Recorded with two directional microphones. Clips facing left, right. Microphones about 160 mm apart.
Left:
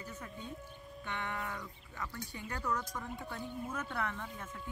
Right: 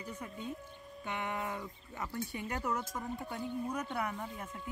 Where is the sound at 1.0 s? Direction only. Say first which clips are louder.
Right 3 dB; 15° right (ahead or behind).